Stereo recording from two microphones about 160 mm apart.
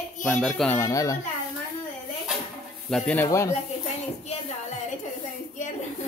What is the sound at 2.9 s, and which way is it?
Speech, 5° left (ahead or behind).